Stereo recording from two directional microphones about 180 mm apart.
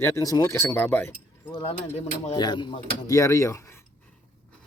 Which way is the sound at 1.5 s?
30° left (ahead or behind).